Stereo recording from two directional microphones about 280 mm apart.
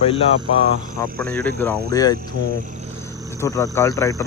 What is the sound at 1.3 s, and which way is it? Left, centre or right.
Speech, right.